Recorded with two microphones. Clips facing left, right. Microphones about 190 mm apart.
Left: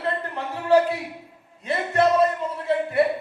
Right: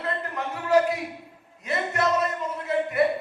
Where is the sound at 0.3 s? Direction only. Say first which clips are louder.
Left 4 dB; 30° left (ahead or behind).